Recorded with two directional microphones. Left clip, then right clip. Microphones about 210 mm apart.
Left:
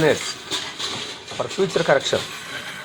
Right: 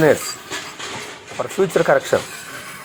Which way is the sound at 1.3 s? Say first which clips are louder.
Right 4 dB; 35° right (ahead or behind).